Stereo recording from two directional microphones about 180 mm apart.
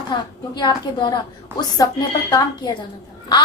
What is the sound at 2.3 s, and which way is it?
Speech, 20° left (ahead or behind).